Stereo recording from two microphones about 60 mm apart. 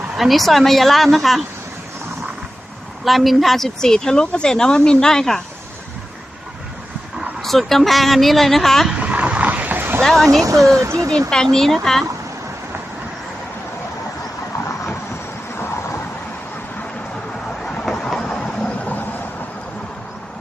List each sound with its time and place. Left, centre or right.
0.2 s speech: centre
3.0 s speech: centre
7.4 s speech: centre
8.9 s a sound: right
10.0 s speech: centre
10.4 s speech: right
11.3 s speech: centre
15.5 s vehicle: left
17.7 s train: centre